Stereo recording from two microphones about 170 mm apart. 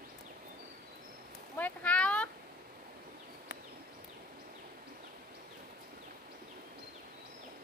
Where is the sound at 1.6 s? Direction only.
10° left (ahead or behind).